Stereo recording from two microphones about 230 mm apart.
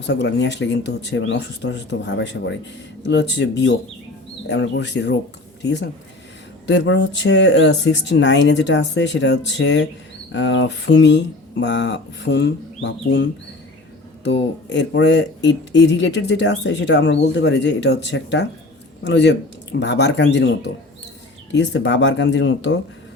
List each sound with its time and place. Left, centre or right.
0.1 s speech: left
6.7 s speech: left
14.3 s speech: left